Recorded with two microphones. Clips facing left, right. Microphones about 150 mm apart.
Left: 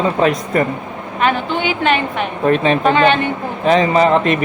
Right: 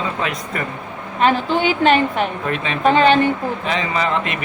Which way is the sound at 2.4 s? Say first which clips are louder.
Left 8 dB; 35° left (ahead or behind).